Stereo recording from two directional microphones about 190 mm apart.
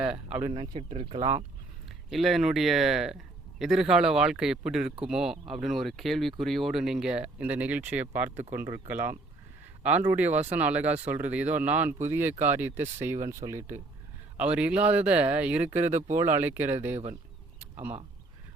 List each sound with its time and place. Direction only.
0.0 s speech: 5° right (ahead or behind)
0.5 s speech: 30° right (ahead or behind)
2.0 s speech: centre (ahead or behind)
15.9 s speech: 40° right (ahead or behind)
16.1 s speech: 10° right (ahead or behind)